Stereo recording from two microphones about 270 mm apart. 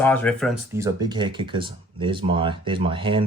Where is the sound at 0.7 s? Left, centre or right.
Centre.